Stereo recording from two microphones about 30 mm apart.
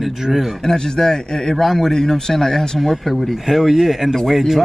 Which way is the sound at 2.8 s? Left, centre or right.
Centre.